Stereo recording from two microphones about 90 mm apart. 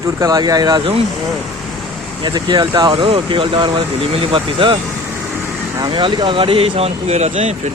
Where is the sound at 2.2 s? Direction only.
55° right (ahead or behind).